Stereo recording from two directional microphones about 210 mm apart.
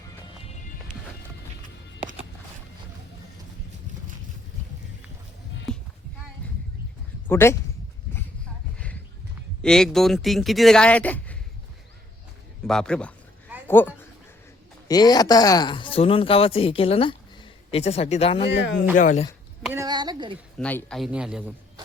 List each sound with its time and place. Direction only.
7.3 s speech: 10° left (ahead or behind)
9.6 s speech: 5° left (ahead or behind)
12.6 s speech: 5° left (ahead or behind)
13.7 s a sound: 10° left (ahead or behind)
14.8 s speech: 20° left (ahead or behind)
18.4 s speech: 55° left (ahead or behind)
18.9 s speech: 40° left (ahead or behind)
19.7 s a sound: 20° right (ahead or behind)
20.6 s speech: 5° left (ahead or behind)